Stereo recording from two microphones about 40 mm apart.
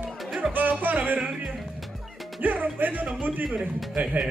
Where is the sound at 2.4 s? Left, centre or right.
Right.